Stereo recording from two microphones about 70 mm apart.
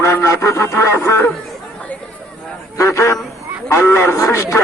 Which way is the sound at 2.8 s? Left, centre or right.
Left.